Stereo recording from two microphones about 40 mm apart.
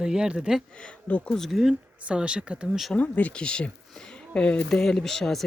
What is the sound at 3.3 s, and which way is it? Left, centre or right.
Speech, left.